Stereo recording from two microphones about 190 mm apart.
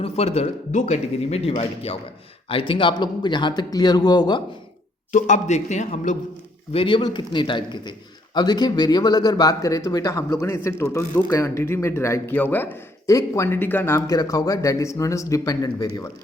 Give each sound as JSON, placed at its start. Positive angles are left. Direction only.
{"t": 0.0, "sound": "speech", "side_deg": 35}
{"t": 5.1, "sound": "speech", "side_deg": 40}
{"t": 6.7, "sound": "a man's voice", "side_deg": 25}